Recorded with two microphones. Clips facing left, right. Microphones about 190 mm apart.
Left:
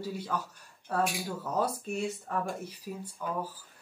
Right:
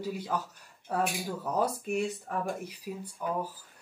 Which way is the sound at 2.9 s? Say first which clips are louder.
Right 1 dB; 15° right (ahead or behind).